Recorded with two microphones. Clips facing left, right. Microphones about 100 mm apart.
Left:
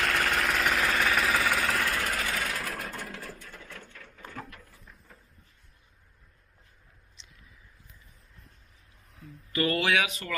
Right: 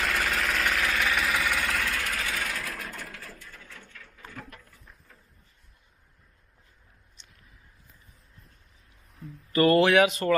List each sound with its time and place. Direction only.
0.0 s engine: centre (ahead or behind)
2.0 s sewing machine: centre (ahead or behind)
2.9 s sewing machine: 20° left (ahead or behind)
9.5 s speech: 35° right (ahead or behind)